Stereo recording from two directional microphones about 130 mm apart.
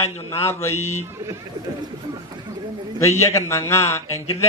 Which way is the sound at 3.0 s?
20° left (ahead or behind).